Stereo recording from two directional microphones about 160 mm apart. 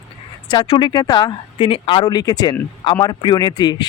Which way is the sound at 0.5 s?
35° left (ahead or behind).